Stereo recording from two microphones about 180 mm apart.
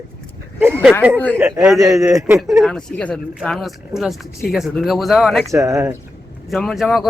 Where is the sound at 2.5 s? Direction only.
Centre (ahead or behind).